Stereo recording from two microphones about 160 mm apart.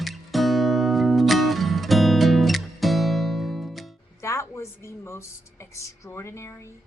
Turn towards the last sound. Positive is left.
turn(degrees=15)  # may be behind; listen again after turning